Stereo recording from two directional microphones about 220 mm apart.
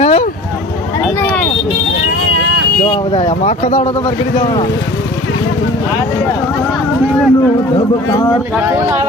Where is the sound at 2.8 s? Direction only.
25° left (ahead or behind).